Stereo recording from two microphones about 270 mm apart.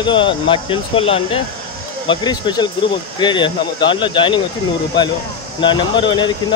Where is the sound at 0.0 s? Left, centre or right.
Centre.